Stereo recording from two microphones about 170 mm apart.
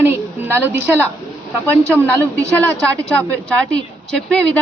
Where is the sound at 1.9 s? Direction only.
10° left (ahead or behind).